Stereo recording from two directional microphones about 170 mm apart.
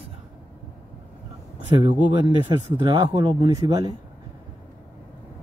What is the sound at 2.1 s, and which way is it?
Speech, 25° right (ahead or behind).